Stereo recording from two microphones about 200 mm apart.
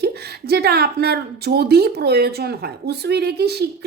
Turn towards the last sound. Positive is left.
turn(degrees=-55)  # may be behind; listen again after turning